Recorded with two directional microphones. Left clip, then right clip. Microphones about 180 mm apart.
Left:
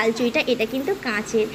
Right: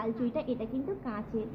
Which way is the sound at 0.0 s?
15° left (ahead or behind).